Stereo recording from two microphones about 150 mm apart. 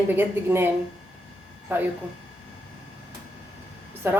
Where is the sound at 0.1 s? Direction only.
15° right (ahead or behind).